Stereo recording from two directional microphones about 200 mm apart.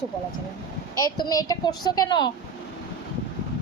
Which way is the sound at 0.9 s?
20° left (ahead or behind).